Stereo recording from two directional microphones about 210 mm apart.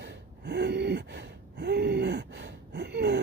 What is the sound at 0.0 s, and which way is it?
Gasp, 55° right (ahead or behind).